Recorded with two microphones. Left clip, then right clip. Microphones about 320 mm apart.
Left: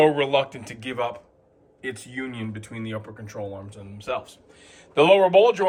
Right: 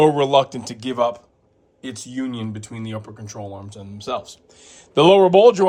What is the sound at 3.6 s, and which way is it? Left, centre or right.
Speech, right.